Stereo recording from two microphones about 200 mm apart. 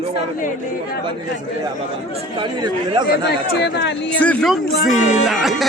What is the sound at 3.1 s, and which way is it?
Speech, 55° left (ahead or behind).